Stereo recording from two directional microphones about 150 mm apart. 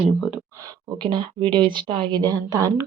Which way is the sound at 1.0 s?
30° right (ahead or behind).